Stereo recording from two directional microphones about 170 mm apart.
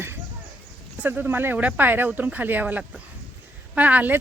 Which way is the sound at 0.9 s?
10° right (ahead or behind).